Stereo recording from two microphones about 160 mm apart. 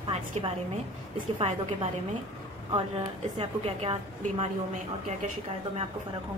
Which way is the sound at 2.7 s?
35° right (ahead or behind).